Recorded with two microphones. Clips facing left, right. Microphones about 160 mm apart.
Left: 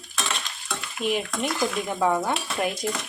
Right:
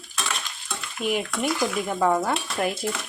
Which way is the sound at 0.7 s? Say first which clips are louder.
Even; 5° right (ahead or behind).